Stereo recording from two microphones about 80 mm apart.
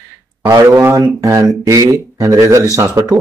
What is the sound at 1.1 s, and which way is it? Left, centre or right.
Speech, right.